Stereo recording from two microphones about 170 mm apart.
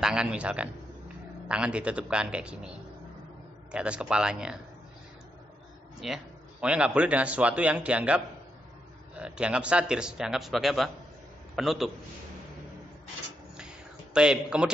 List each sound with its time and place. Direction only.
0.0 s a man's voice: 5° right (ahead or behind)
3.7 s a man's voice: 5° right (ahead or behind)
5.9 s a man's voice: 5° right (ahead or behind)
14.1 s a man's voice: 5° right (ahead or behind)